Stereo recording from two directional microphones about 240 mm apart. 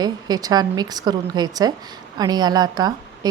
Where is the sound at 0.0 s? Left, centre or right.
Centre.